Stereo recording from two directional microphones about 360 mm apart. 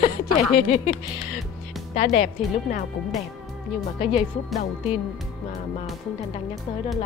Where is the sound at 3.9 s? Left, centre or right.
Centre.